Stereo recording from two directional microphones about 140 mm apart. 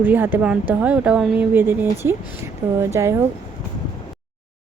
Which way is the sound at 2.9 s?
20° right (ahead or behind).